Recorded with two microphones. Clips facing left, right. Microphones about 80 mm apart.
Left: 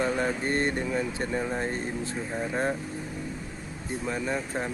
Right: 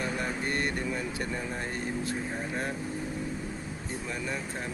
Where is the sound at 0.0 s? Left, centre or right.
Left.